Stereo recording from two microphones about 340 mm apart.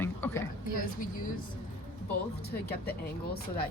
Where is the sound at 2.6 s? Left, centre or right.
Left.